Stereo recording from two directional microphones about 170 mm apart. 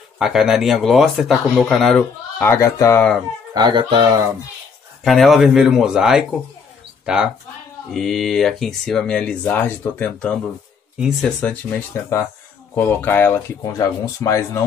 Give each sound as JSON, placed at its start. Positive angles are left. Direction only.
{"t": 0.2, "sound": "speech", "side_deg": 0}
{"t": 2.4, "sound": "speech", "side_deg": 15}
{"t": 3.5, "sound": "speech", "side_deg": -25}
{"t": 5.0, "sound": "speech", "side_deg": 0}
{"t": 7.9, "sound": "speech", "side_deg": 0}
{"t": 11.7, "sound": "speech", "side_deg": 15}